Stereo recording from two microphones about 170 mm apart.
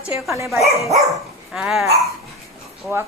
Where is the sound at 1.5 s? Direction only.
Centre (ahead or behind).